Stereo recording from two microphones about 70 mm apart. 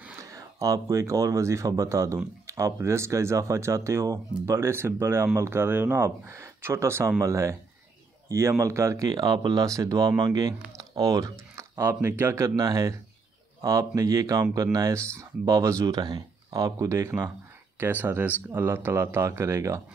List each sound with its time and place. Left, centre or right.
0.2 s speech: right
9.1 s speech: right
12.4 s speech: right
15.9 s speech: right
16.5 s speech: right
17.7 s speech: right